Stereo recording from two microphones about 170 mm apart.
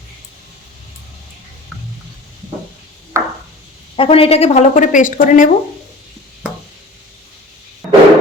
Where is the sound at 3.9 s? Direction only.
35° left (ahead or behind); by 5.5 s 50° left (ahead or behind).